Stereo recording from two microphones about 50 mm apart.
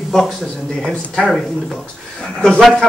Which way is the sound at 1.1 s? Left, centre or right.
Centre.